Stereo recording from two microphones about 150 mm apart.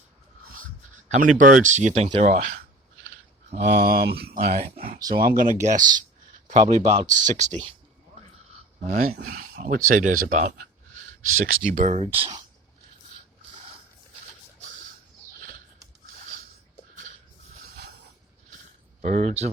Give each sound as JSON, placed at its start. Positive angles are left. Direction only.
{"t": 0.5, "sound": "a sound", "side_deg": -55}
{"t": 2.0, "sound": "speech", "side_deg": -55}
{"t": 3.7, "sound": "speech", "side_deg": -90}
{"t": 5.1, "sound": "speech", "side_deg": -70}
{"t": 5.6, "sound": "speech", "side_deg": -60}
{"t": 8.8, "sound": "speech", "side_deg": -55}
{"t": 19.0, "sound": "speech", "side_deg": -55}